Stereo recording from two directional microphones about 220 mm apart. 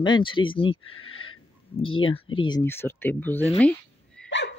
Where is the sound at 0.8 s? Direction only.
70° left (ahead or behind).